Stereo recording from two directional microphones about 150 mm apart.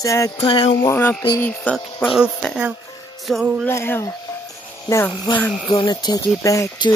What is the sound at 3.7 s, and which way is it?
Speech, 15° left (ahead or behind).